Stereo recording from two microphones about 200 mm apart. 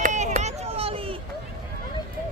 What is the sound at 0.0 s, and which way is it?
Run, 35° right (ahead or behind).